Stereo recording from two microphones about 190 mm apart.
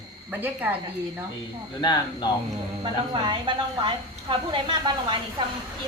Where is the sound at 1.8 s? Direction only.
25° left (ahead or behind).